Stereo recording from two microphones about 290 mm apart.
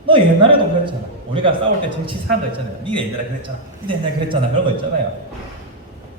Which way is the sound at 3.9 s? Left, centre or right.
Centre.